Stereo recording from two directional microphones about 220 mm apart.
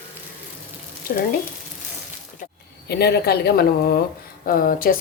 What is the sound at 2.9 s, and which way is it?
A woman's voice, 45° left (ahead or behind).